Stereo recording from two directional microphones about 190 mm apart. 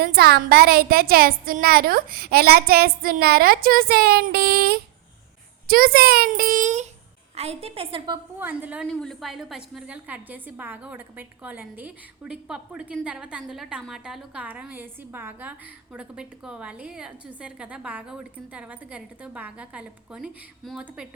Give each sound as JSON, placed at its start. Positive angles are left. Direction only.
{"t": 0.0, "sound": "a woman's voice", "side_deg": -55}
{"t": 8.4, "sound": "a woman's voice", "side_deg": -10}